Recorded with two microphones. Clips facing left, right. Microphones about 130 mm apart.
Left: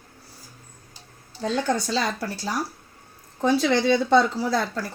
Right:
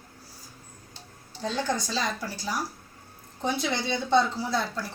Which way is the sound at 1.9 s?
70° left (ahead or behind).